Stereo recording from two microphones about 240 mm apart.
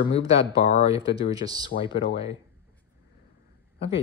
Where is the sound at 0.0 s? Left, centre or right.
Left.